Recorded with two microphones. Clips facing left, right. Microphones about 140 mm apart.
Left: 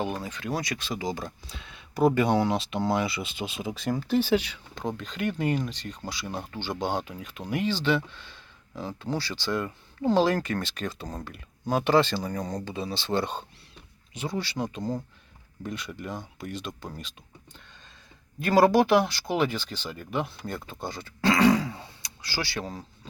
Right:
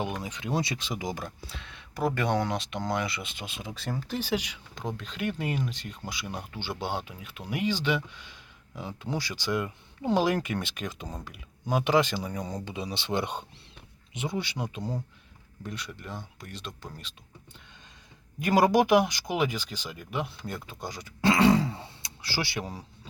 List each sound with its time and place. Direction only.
0.2 s speech: 20° right (ahead or behind); by 2.5 s 5° left (ahead or behind)
2.5 s speech: 30° left (ahead or behind)
3.7 s speech: 10° left (ahead or behind)
4.7 s speech: centre (ahead or behind)
18.3 s speech: 15° right (ahead or behind)
21.2 s throat clearing: 20° right (ahead or behind)